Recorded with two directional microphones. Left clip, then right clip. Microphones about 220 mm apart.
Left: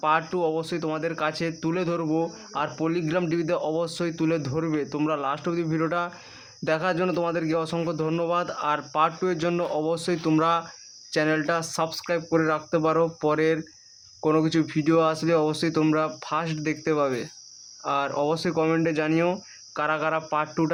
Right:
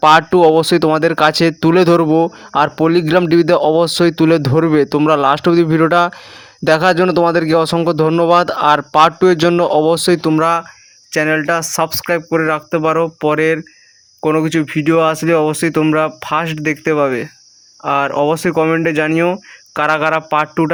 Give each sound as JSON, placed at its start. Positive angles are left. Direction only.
{"t": 0.0, "sound": "speech", "side_deg": -45}